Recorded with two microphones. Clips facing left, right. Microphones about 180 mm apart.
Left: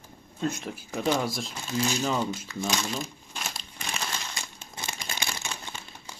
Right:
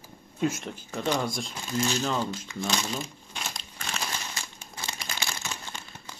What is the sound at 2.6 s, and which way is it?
Crumpling, centre (ahead or behind).